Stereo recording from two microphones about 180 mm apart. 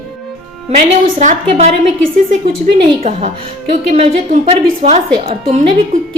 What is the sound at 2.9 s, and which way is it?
A woman's voice, 35° right (ahead or behind).